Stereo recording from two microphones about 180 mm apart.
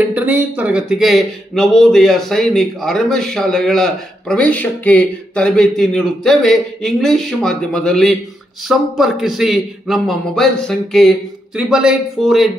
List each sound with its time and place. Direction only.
0.1 s speech: 10° right (ahead or behind)